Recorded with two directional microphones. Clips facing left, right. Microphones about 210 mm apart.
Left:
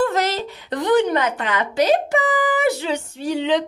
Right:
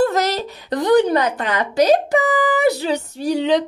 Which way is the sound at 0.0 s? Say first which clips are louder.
Right 2 dB; 40° right (ahead or behind).